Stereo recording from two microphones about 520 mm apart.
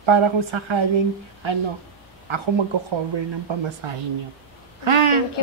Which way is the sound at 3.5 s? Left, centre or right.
Right.